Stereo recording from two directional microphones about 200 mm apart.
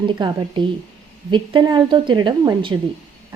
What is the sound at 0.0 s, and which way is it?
A woman's voice, 25° right (ahead or behind).